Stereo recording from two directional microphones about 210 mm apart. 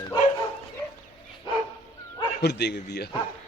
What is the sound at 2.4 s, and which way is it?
Speech, 50° left (ahead or behind).